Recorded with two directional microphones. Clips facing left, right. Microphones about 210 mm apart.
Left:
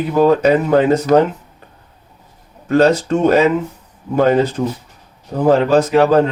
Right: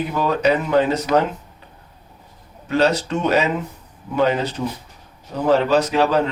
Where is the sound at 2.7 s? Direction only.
50° left (ahead or behind).